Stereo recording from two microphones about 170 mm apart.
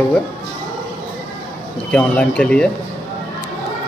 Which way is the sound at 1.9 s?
5° left (ahead or behind).